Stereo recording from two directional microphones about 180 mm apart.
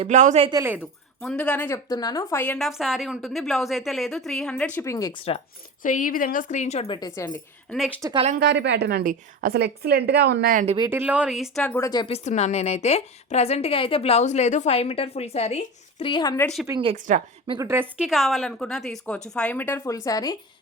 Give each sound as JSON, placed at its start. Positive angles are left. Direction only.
{"t": 0.0, "sound": "speech", "side_deg": -40}
{"t": 0.6, "sound": "a woman's voice", "side_deg": -10}
{"t": 1.2, "sound": "speech", "side_deg": 5}
{"t": 2.4, "sound": "a woman's voice", "side_deg": 5}
{"t": 5.8, "sound": "a woman's voice", "side_deg": 45}
{"t": 7.7, "sound": "a woman's voice", "side_deg": 5}
{"t": 8.4, "sound": "a woman's voice", "side_deg": -70}
{"t": 10.5, "sound": "speech", "side_deg": -45}
{"t": 10.8, "sound": "a woman's voice", "side_deg": -10}
{"t": 11.8, "sound": "a woman's voice", "side_deg": 25}
{"t": 16.6, "sound": "a woman's voice", "side_deg": -25}
{"t": 17.7, "sound": "a woman's voice", "side_deg": -10}